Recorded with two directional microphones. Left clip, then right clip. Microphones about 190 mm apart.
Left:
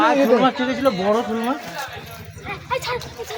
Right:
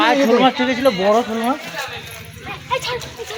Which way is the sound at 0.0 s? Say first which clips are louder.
Right 2 dB; 35° right (ahead or behind).